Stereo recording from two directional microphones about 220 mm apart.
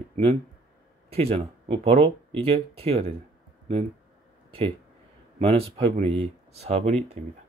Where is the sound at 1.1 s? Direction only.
25° right (ahead or behind).